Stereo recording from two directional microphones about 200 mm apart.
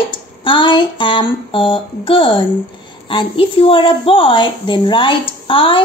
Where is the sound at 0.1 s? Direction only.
25° left (ahead or behind).